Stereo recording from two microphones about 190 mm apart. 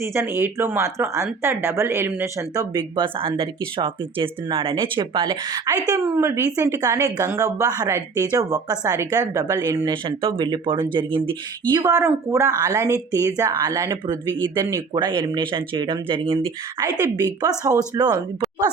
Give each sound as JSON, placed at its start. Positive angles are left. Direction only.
{"t": 0.0, "sound": "speech", "side_deg": -15}